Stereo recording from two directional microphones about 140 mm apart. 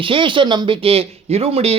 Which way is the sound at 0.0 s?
35° right (ahead or behind).